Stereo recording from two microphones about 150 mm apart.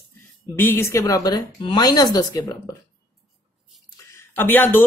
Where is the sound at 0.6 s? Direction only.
15° left (ahead or behind).